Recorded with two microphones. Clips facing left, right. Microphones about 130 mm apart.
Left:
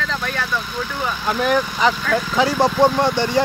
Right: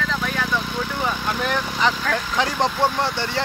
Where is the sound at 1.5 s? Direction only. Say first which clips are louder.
Left 5 dB; 10° left (ahead or behind).